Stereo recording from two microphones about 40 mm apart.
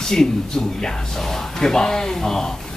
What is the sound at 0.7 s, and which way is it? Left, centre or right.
Speech, centre.